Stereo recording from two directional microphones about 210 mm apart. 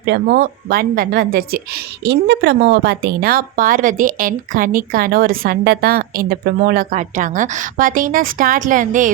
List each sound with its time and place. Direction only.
0.0 s speech: 50° right (ahead or behind)